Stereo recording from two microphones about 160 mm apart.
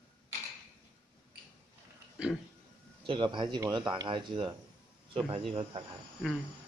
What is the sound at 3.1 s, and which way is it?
Speech, 30° right (ahead or behind).